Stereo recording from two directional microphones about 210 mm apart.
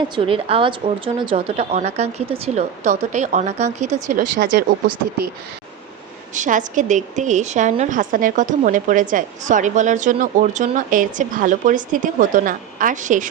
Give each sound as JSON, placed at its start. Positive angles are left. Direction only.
{"t": 0.2, "sound": "a woman's voice", "side_deg": -25}
{"t": 6.3, "sound": "a woman's voice", "side_deg": -35}